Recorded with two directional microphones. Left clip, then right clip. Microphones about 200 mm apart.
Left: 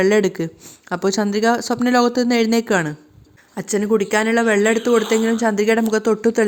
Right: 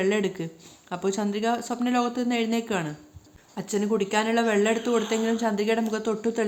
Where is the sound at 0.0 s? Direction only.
35° left (ahead or behind).